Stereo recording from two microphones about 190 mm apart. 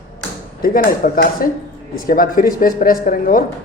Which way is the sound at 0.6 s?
50° left (ahead or behind).